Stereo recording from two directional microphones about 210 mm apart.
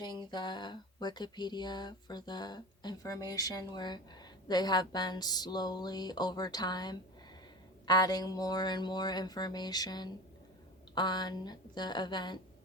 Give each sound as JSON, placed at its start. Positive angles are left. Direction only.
{"t": 0.0, "sound": "speech", "side_deg": 20}